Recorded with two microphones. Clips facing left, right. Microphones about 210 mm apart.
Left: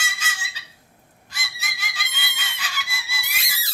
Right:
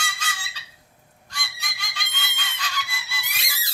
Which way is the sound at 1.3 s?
5° left (ahead or behind).